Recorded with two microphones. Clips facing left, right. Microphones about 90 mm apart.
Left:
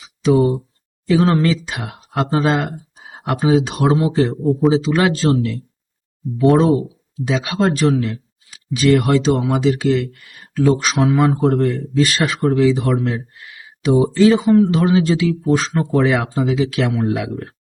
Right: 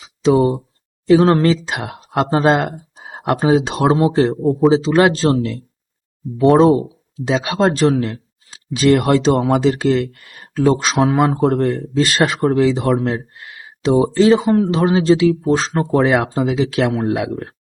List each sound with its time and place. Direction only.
0.2 s a man's voice: 30° right (ahead or behind)
7.3 s a man's voice: 35° right (ahead or behind)